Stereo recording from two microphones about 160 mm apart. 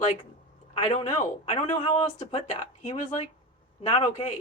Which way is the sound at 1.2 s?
40° left (ahead or behind).